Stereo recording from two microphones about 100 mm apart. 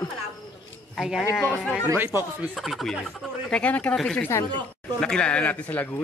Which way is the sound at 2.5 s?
Centre (ahead or behind).